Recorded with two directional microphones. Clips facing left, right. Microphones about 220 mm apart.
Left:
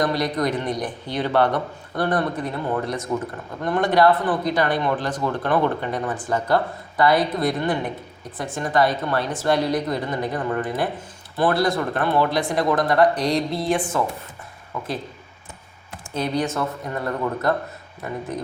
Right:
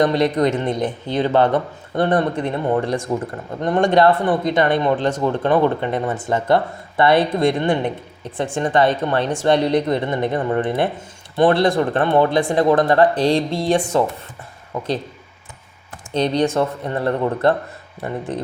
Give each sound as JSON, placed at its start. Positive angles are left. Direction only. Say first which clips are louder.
{"t": 0.0, "sound": "speech", "louder": "right 6 dB", "side_deg": -25}
{"t": 16.1, "sound": "speech", "louder": "right 5 dB", "side_deg": 5}
{"t": 16.6, "sound": "speech", "louder": "right 6 dB", "side_deg": -30}